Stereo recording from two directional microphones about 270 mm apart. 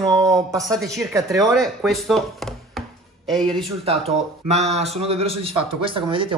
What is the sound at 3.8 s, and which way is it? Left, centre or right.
A man's voice, right.